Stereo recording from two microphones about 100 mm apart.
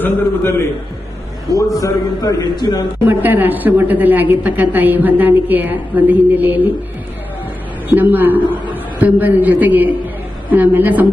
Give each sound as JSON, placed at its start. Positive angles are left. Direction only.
{"t": 0.0, "sound": "a man's voice", "side_deg": 25}
{"t": 1.5, "sound": "a man's voice", "side_deg": 40}
{"t": 3.1, "sound": "a woman's voice", "side_deg": -20}
{"t": 7.9, "sound": "a woman's voice", "side_deg": -20}